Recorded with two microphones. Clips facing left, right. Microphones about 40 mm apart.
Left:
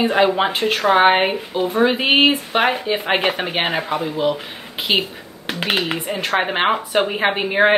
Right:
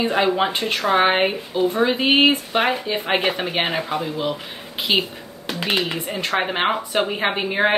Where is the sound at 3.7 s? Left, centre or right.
Centre.